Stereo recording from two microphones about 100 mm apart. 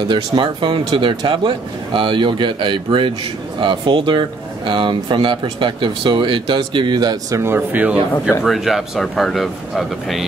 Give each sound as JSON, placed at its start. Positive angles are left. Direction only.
{"t": 0.1, "sound": "speech", "side_deg": -55}
{"t": 7.5, "sound": "speech", "side_deg": -15}
{"t": 8.5, "sound": "speech", "side_deg": 0}